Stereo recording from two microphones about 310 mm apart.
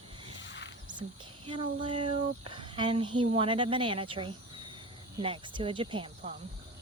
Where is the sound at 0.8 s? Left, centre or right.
Centre.